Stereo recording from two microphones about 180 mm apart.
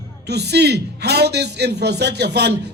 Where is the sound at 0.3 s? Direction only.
65° right (ahead or behind).